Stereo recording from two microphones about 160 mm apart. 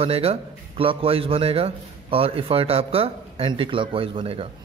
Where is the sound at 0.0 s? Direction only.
40° right (ahead or behind).